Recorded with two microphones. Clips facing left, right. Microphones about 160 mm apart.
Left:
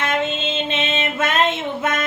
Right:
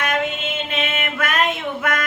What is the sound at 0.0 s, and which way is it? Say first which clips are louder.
Female singing: left 1 dB; 25° left (ahead or behind).